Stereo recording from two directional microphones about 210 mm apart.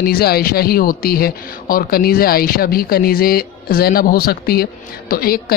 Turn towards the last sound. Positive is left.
turn(degrees=45)  # may be behind; listen again after turning